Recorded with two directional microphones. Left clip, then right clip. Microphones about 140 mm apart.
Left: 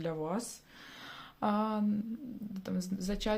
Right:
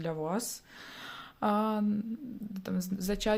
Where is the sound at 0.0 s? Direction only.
20° right (ahead or behind).